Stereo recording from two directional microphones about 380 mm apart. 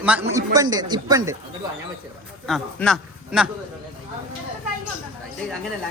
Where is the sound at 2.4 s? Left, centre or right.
Centre.